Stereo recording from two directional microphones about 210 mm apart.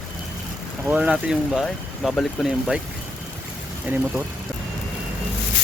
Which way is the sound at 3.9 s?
10° right (ahead or behind).